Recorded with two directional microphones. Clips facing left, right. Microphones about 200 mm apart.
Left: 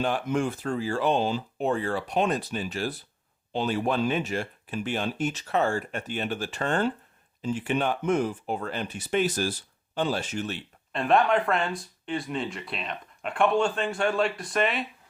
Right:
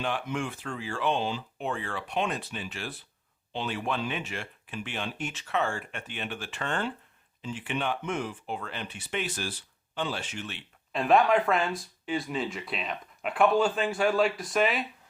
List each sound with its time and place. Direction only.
0.0 s speech: 40° left (ahead or behind)
10.9 s speech: centre (ahead or behind)